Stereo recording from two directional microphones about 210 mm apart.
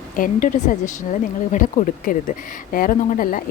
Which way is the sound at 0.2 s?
40° left (ahead or behind).